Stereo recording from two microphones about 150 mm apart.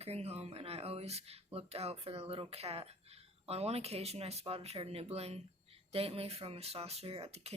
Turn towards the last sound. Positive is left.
turn(degrees=-45)  # may be behind; listen again after turning